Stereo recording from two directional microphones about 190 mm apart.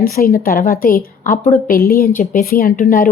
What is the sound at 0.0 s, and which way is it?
A woman's voice, 50° left (ahead or behind).